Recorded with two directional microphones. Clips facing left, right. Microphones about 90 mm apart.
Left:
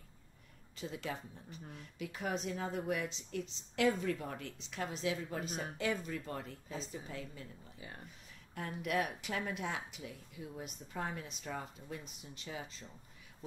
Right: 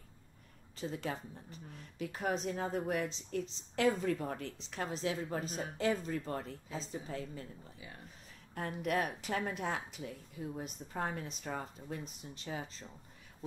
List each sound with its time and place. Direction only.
0.7 s a woman's voice: 40° right (ahead or behind)
8.5 s a woman's voice: 40° right (ahead or behind)